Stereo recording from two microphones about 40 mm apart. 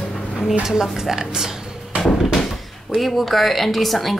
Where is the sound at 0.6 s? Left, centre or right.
Centre.